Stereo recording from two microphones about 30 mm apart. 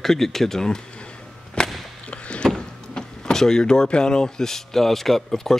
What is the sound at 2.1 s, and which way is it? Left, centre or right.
Rowboat, left.